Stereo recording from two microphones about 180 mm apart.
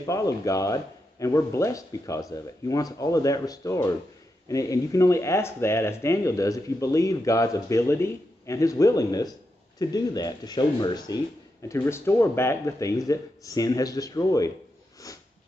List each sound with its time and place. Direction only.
0.0 s speech: 20° left (ahead or behind)
15.0 s sniff: 20° left (ahead or behind)